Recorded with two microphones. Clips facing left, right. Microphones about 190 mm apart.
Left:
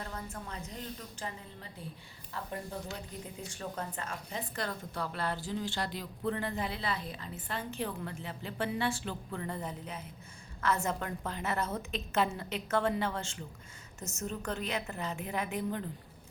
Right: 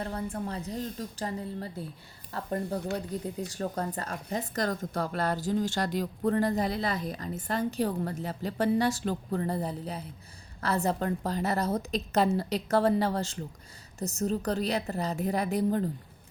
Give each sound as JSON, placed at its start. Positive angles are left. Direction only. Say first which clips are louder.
{"t": 0.0, "sound": "speech", "louder": "right 9 dB", "side_deg": -35}